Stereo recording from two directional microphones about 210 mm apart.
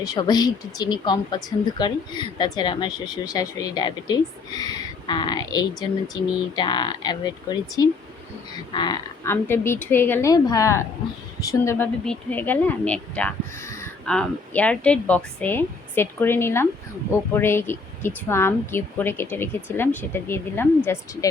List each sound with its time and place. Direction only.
0.0 s a woman's voice: 20° left (ahead or behind)